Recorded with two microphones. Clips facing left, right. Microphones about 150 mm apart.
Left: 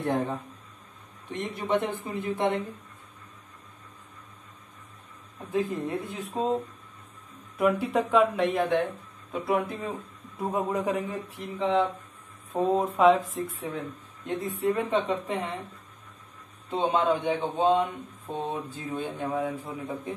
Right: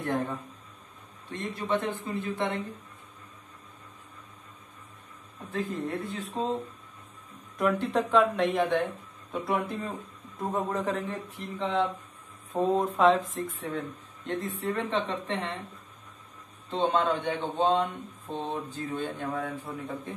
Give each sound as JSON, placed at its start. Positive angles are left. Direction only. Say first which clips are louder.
{"t": 0.0, "sound": "speech", "louder": "left 2 dB", "side_deg": 20}
{"t": 5.4, "sound": "speech", "louder": "left 4 dB", "side_deg": 15}
{"t": 7.5, "sound": "speech", "louder": "left 2 dB", "side_deg": 5}
{"t": 16.7, "sound": "speech", "louder": "left 1 dB", "side_deg": 5}